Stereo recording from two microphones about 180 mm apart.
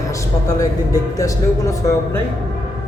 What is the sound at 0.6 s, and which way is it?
Speech, 20° left (ahead or behind).